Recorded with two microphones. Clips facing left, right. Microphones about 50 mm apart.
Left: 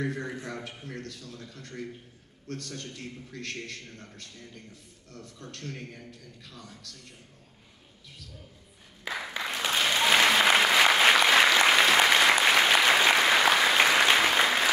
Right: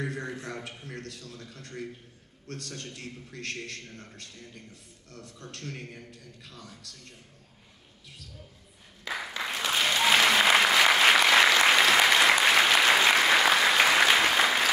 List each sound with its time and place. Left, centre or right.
0.0 s a man's voice: centre
5.1 s a man's voice: centre
9.1 s applause: centre
9.7 s applause: centre